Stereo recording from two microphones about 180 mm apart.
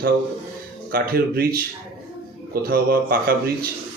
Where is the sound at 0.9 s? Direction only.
55° right (ahead or behind).